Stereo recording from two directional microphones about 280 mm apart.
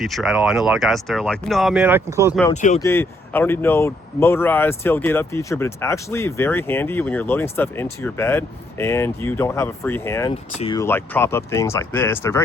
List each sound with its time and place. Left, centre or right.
0.0 s speech: centre
2.5 s speech: left
2.8 s speech: centre